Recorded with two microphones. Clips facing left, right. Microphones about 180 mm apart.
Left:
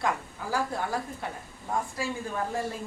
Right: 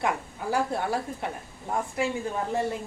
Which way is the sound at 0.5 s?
25° right (ahead or behind).